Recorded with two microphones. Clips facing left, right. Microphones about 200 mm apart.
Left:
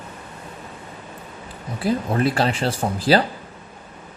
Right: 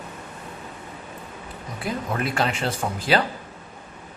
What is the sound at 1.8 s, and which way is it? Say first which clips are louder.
Speech: left 6 dB; 35° left (ahead or behind).